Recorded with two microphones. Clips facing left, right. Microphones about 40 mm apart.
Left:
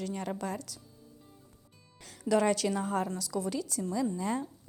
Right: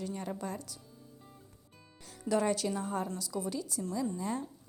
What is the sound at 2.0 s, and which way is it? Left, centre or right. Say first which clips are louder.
A woman's voice: left 3 dB; left.